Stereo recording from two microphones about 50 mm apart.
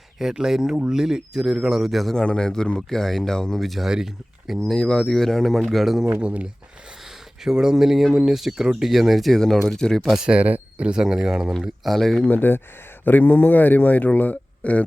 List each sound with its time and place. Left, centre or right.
0.2 s speech: centre
2.1 s speech: centre
3.6 s speech: centre
4.6 s speech: centre
6.2 s speech: right
7.4 s speech: centre
9.4 s speech: centre
10.0 s speech: centre
10.2 s speech: right
11.6 s speech: centre
12.2 s speech: left